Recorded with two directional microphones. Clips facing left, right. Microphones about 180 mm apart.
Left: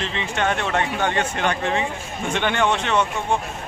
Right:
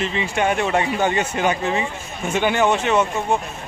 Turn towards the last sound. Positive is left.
turn(degrees=-5)  # may be behind; listen again after turning